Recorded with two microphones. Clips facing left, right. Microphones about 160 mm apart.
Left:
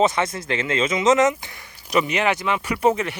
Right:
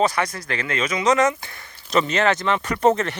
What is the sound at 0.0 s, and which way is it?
Speech, 25° left (ahead or behind).